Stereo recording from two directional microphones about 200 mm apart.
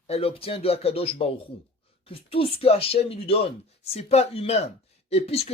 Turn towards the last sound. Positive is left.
turn(degrees=30)  # may be behind; listen again after turning